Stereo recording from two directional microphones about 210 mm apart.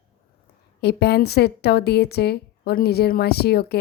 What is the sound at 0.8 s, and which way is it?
A woman's voice, 50° left (ahead or behind).